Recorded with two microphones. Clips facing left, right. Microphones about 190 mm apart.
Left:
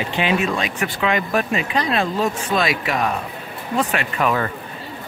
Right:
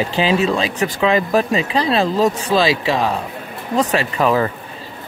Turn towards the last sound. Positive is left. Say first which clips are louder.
# right 4 dB
turn(degrees=-30)  # may be behind; listen again after turning